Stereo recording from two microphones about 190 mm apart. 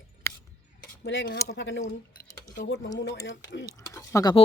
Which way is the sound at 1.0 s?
70° left (ahead or behind).